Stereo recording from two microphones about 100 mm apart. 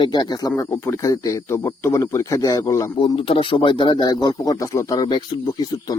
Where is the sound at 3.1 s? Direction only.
65° left (ahead or behind); by 5.0 s 35° left (ahead or behind).